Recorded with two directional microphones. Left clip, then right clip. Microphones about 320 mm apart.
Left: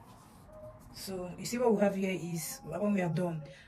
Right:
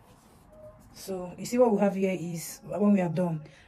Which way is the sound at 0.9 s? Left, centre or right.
Centre.